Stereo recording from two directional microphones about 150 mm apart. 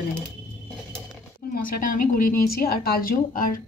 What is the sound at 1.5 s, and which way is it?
A woman's voice, 70° left (ahead or behind).